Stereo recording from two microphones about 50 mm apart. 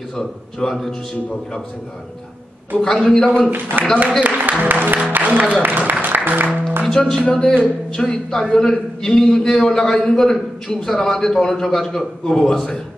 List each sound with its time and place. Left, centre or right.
0.1 s a man's voice: centre
2.8 s a man's voice: centre
3.4 s a man's voice: right
6.8 s a man's voice: centre